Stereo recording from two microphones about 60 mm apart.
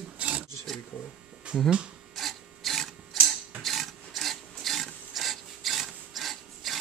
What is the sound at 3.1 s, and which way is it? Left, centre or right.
Mechanisms, centre.